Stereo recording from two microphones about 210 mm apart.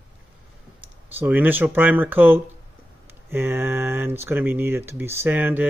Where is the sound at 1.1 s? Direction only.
10° right (ahead or behind).